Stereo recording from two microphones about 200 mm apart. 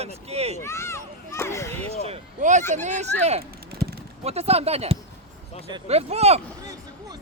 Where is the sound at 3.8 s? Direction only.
5° left (ahead or behind).